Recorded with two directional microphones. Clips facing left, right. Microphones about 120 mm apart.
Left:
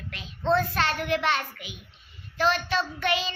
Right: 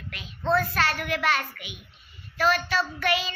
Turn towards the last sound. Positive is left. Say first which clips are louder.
# right 1 dB
turn(degrees=30)  # may be behind; listen again after turning